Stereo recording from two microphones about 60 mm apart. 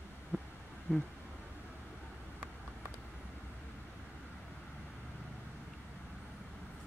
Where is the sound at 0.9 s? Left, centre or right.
Left.